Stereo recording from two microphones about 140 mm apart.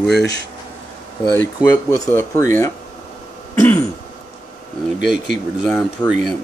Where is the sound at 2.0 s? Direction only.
20° left (ahead or behind).